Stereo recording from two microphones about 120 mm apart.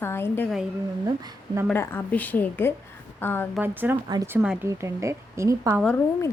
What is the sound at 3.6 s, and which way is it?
A woman's voice, 15° right (ahead or behind).